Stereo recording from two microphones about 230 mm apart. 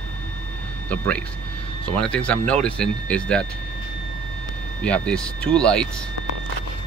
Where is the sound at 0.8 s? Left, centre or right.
Centre.